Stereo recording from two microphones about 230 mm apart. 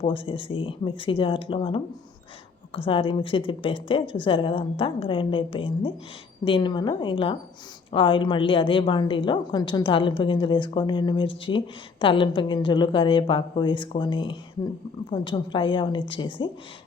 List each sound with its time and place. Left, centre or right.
0.0 s a woman's voice: left